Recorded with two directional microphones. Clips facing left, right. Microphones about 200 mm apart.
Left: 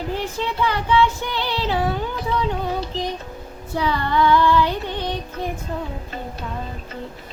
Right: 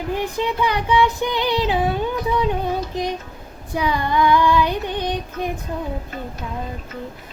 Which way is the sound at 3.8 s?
15° right (ahead or behind).